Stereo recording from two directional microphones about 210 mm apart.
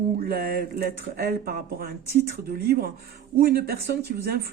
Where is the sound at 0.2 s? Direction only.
45° right (ahead or behind).